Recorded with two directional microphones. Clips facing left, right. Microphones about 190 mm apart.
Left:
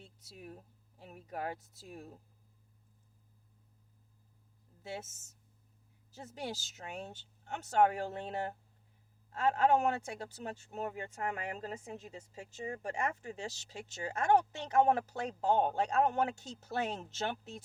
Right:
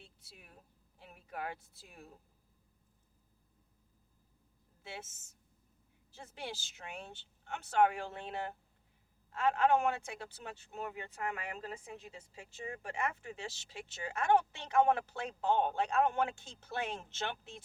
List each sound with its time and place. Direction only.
0.0 s a sound: 40° left (ahead or behind)
0.9 s speech: 40° left (ahead or behind)
4.8 s a woman's voice: 40° left (ahead or behind)